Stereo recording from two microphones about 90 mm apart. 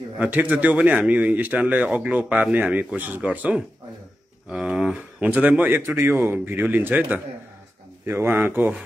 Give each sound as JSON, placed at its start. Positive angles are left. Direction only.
{"t": 0.2, "sound": "speech", "side_deg": -15}
{"t": 5.8, "sound": "a man's voice", "side_deg": -30}